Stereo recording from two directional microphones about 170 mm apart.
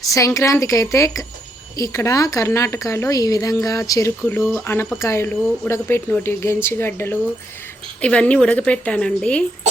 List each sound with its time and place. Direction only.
0.0 s a woman's voice: 20° left (ahead or behind)